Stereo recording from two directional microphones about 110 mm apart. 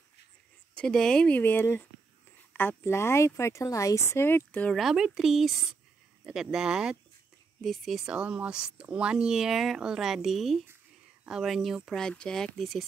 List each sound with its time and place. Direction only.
0.7 s speech: 5° left (ahead or behind)
4.7 s speech: 5° right (ahead or behind)